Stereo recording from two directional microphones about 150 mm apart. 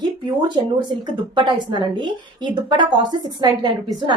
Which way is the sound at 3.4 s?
30° right (ahead or behind).